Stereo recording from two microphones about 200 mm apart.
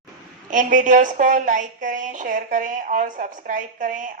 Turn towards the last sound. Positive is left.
turn(degrees=-40)  # may be behind; listen again after turning